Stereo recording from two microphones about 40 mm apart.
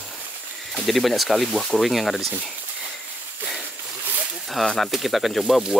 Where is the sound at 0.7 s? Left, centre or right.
Centre.